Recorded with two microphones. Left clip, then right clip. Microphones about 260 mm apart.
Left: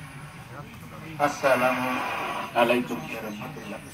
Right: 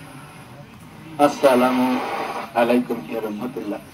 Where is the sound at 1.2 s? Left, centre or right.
Right.